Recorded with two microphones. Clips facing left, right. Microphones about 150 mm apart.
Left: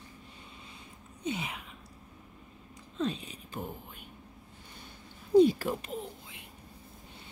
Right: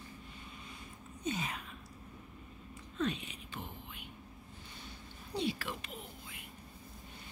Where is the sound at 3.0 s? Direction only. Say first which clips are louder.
Left 3 dB; 35° left (ahead or behind).